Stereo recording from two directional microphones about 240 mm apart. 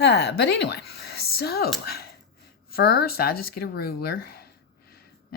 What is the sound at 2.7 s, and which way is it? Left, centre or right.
Speech, left.